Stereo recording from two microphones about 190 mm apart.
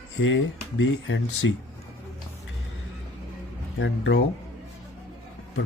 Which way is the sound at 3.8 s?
75° left (ahead or behind).